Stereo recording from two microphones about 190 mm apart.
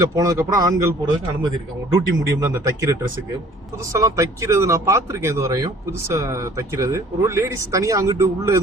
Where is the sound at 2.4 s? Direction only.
15° right (ahead or behind).